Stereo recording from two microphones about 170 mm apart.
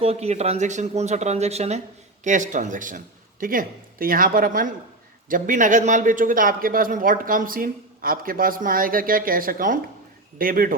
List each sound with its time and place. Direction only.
0.0 s speech: 35° right (ahead or behind); by 10.8 s 55° right (ahead or behind)